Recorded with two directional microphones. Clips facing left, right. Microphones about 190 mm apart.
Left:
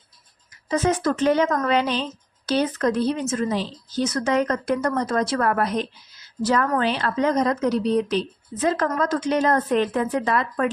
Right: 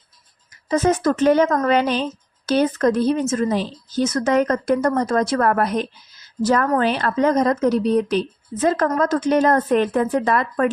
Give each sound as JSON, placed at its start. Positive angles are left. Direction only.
{"t": 0.7, "sound": "speech", "side_deg": -45}